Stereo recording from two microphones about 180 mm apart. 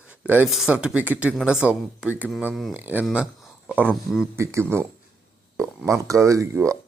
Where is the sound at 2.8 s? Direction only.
10° right (ahead or behind).